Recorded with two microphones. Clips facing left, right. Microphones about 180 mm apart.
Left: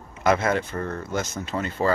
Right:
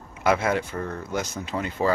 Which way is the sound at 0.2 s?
10° right (ahead or behind).